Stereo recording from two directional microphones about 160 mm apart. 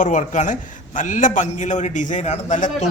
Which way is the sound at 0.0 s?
50° left (ahead or behind).